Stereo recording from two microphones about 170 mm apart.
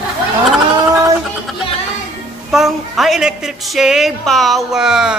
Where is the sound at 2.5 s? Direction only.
Centre (ahead or behind).